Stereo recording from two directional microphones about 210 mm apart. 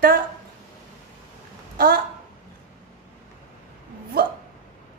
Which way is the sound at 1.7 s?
45° right (ahead or behind).